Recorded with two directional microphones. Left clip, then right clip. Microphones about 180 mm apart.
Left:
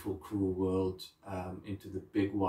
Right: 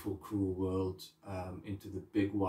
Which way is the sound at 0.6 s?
Centre (ahead or behind).